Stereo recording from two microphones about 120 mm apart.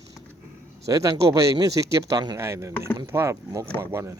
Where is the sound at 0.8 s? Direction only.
25° right (ahead or behind).